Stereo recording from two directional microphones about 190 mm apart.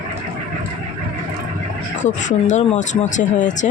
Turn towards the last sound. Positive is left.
turn(degrees=40)  # may be behind; listen again after turning